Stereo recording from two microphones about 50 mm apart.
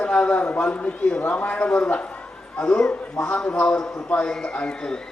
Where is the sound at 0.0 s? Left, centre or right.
Left.